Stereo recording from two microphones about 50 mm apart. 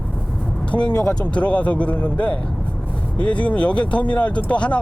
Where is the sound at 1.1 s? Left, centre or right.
Left.